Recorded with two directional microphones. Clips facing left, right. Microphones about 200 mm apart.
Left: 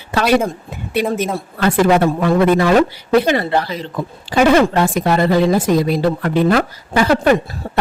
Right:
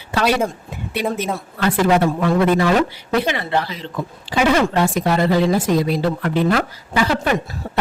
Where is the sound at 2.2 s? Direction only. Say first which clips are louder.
Left 3 dB; 45° left (ahead or behind).